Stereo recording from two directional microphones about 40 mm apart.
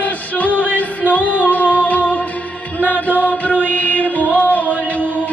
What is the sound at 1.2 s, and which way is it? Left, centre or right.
Music, right.